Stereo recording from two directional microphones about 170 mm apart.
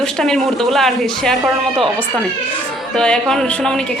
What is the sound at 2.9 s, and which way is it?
Speech, 5° left (ahead or behind).